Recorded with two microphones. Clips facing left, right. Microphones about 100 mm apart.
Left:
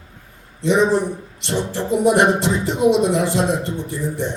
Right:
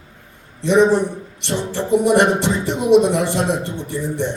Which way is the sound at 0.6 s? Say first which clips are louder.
Right 3 dB; 65° right (ahead or behind).